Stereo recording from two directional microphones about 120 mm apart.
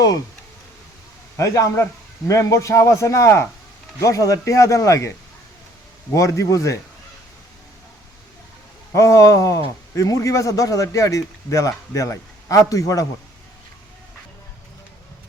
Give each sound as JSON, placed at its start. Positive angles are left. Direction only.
{"t": 1.4, "sound": "a man's voice", "side_deg": 25}
{"t": 6.1, "sound": "a man's voice", "side_deg": 25}
{"t": 8.9, "sound": "a man's voice", "side_deg": 25}